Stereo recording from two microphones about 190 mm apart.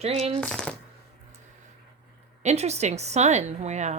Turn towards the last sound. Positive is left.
turn(degrees=-35)  # may be behind; listen again after turning